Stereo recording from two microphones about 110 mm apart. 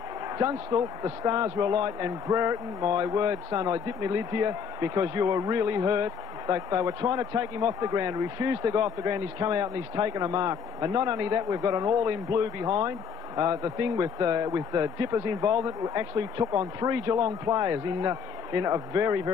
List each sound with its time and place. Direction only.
0.4 s a man's voice: 35° right (ahead or behind)